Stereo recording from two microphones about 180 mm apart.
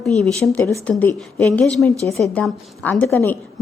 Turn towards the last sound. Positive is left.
turn(degrees=15)  # may be behind; listen again after turning